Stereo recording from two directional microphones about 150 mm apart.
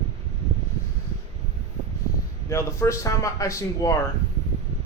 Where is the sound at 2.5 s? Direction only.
20° left (ahead or behind).